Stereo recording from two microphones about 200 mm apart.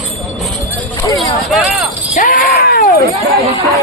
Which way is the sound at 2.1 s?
45° left (ahead or behind).